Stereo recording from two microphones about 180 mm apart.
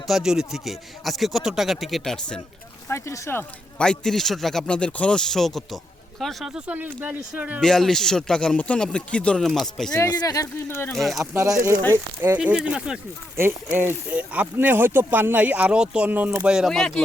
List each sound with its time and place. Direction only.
0.1 s speech: 5° right (ahead or behind)
2.9 s speech: 15° left (ahead or behind); by 7.6 s 10° right (ahead or behind)
7.6 s speech: 5° left (ahead or behind)
9.9 s speech: 20° left (ahead or behind)
10.9 s speech: centre (ahead or behind)
11.2 s speech: 20° right (ahead or behind); by 17.0 s centre (ahead or behind)